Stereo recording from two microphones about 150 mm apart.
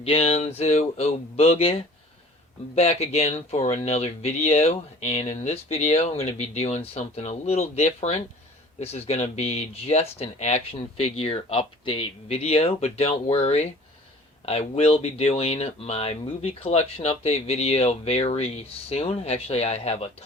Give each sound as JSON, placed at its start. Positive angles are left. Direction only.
{"t": 0.0, "sound": "speech", "side_deg": 40}